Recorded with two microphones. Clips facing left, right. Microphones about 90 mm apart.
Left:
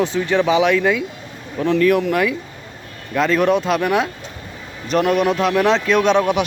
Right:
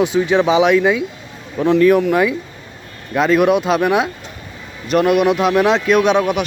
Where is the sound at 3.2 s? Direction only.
10° right (ahead or behind).